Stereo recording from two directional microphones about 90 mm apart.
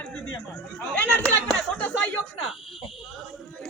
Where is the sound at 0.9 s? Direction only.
15° left (ahead or behind).